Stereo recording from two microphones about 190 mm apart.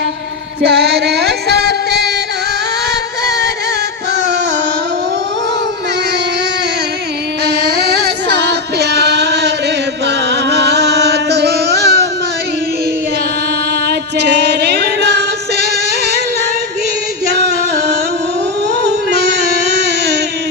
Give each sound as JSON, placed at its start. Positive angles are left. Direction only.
{"t": 0.6, "sound": "music", "side_deg": -60}
{"t": 7.4, "sound": "female singing", "side_deg": -60}
{"t": 13.8, "sound": "music", "side_deg": -60}
{"t": 18.8, "sound": "music", "side_deg": -65}